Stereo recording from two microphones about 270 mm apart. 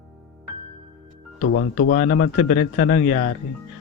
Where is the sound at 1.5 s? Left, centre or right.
Left.